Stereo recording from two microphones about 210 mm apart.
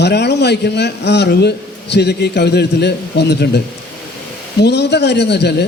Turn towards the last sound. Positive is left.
turn(degrees=50)  # may be behind; listen again after turning